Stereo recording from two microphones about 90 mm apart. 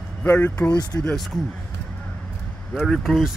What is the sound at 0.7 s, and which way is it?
Speech, 45° left (ahead or behind).